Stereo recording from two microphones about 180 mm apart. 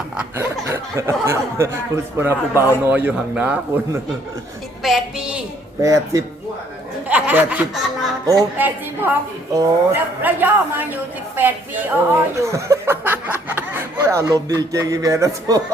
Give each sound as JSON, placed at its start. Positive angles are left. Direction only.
{"t": 0.2, "sound": "a woman's voice", "side_deg": -10}
{"t": 5.8, "sound": "a man's voice", "side_deg": -20}